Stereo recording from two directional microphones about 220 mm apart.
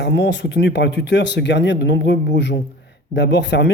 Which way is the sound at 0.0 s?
50° left (ahead or behind).